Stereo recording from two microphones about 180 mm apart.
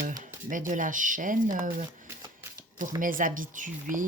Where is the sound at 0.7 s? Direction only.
45° right (ahead or behind).